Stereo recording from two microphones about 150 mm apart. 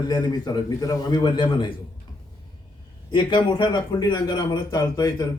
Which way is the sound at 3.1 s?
30° left (ahead or behind).